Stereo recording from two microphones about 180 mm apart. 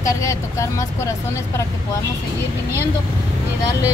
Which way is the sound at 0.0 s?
15° left (ahead or behind).